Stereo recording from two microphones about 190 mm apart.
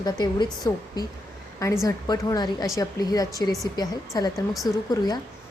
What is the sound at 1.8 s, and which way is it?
A woman's voice, 20° left (ahead or behind).